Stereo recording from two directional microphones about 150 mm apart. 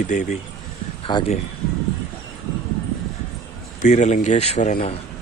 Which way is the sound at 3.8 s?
50° left (ahead or behind).